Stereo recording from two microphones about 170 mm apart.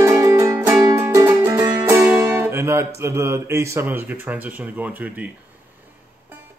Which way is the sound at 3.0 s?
15° right (ahead or behind).